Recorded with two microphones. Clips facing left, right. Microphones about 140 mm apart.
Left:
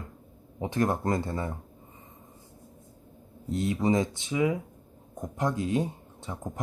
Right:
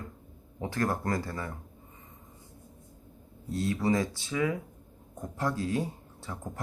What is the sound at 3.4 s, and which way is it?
Speech, 20° left (ahead or behind).